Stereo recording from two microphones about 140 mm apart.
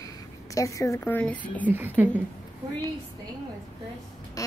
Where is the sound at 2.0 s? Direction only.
15° right (ahead or behind).